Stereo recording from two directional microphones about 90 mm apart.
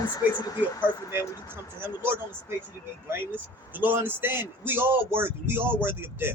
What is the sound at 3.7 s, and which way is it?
Speech, 20° right (ahead or behind).